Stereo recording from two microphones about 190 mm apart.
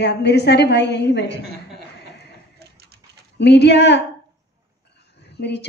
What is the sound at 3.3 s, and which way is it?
Speech, 65° left (ahead or behind).